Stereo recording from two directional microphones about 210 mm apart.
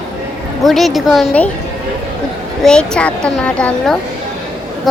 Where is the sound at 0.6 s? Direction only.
Centre (ahead or behind).